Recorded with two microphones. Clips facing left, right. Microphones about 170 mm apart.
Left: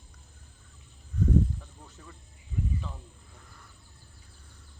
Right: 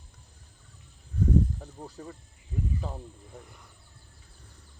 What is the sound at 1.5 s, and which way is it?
Snake, 40° right (ahead or behind).